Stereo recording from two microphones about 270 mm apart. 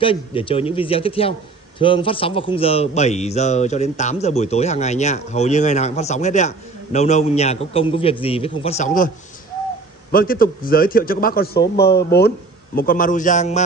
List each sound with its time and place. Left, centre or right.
0.0 s speech: centre
10.1 s a man's voice: left